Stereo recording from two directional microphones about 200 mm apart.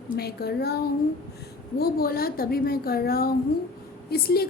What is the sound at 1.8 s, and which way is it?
A woman's voice, 50° left (ahead or behind).